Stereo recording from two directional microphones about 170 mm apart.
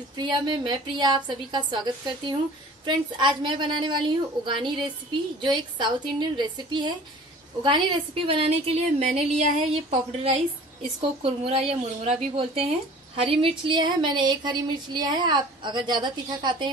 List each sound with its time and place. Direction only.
0.2 s a woman's voice: 25° right (ahead or behind)